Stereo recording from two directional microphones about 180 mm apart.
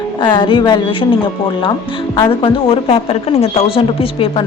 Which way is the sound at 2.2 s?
30° left (ahead or behind).